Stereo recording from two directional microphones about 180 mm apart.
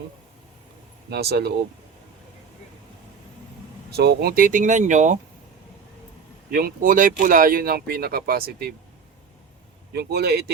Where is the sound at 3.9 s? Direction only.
65° right (ahead or behind); by 5.2 s 45° right (ahead or behind).